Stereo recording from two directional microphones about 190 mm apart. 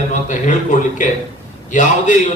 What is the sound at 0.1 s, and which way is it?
A man's voice, 40° left (ahead or behind).